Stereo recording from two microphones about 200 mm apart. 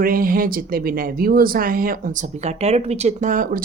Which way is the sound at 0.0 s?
45° right (ahead or behind).